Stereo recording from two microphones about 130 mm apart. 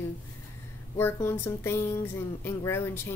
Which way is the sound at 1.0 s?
15° left (ahead or behind).